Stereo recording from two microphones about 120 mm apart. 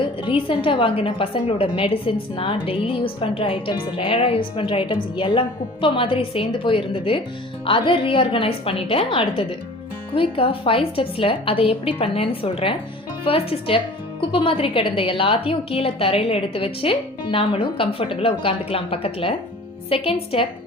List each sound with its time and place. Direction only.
0.0 s speech: 45° left (ahead or behind)